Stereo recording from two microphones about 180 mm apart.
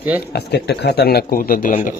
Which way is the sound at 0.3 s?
65° left (ahead or behind).